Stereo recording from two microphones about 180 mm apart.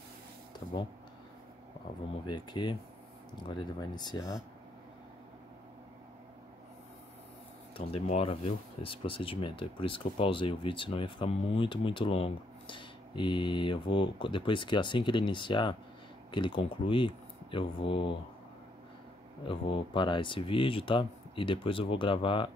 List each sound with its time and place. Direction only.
2.2 s speech: 25° left (ahead or behind)
7.7 s speech: 35° left (ahead or behind)
19.4 s speech: 30° left (ahead or behind)